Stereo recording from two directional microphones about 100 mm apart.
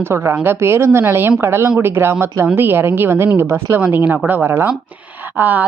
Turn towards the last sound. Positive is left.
turn(degrees=-15)  # may be behind; listen again after turning